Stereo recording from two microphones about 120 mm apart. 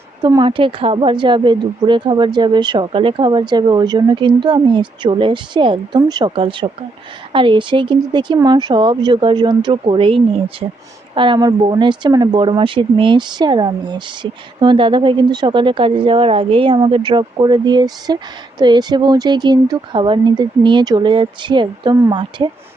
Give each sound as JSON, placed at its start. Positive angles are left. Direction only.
{"t": 0.2, "sound": "speech", "side_deg": -30}
{"t": 0.4, "sound": "a woman's voice", "side_deg": -45}